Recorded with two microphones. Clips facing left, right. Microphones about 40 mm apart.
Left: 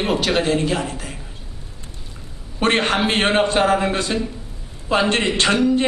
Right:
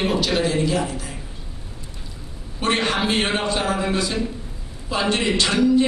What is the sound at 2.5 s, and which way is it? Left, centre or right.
A man's voice, left.